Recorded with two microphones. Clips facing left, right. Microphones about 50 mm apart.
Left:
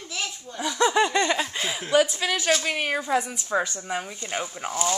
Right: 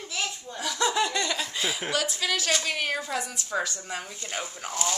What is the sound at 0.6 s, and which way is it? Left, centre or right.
Snicker, centre.